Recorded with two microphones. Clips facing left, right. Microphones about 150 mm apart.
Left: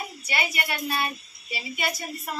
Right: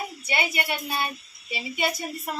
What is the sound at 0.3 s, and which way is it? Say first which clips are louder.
A woman's voice: right 2 dB; 25° right (ahead or behind).